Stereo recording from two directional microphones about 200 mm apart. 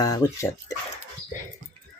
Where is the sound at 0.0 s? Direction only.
15° left (ahead or behind).